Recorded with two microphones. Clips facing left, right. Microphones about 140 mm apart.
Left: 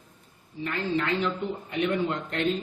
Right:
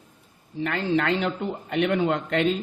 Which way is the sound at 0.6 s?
80° right.